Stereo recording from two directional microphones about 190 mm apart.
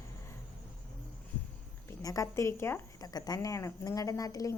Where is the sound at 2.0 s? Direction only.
15° left (ahead or behind).